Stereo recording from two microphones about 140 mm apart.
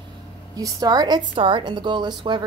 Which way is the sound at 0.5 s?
30° right (ahead or behind).